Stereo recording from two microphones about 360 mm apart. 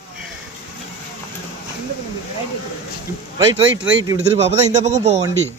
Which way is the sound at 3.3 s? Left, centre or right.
Centre.